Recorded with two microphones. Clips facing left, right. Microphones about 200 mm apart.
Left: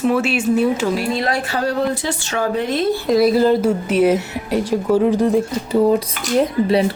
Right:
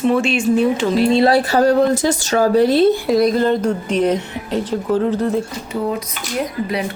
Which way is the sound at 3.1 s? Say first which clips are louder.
Left 1 dB; 5° left (ahead or behind).